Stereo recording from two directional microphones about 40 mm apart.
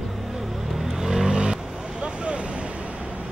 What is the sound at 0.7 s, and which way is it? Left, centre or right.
Vehicle, centre.